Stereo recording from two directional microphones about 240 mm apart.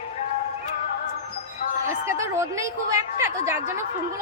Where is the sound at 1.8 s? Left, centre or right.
Centre.